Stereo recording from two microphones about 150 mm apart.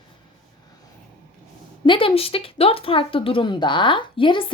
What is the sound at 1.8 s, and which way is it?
Speech, 35° left (ahead or behind).